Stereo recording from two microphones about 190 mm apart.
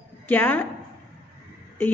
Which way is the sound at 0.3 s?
10° left (ahead or behind).